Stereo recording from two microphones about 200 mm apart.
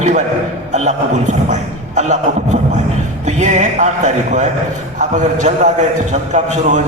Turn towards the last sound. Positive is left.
turn(degrees=-35)  # may be behind; listen again after turning